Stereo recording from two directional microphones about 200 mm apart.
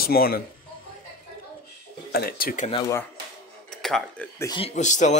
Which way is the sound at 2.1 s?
50° left (ahead or behind).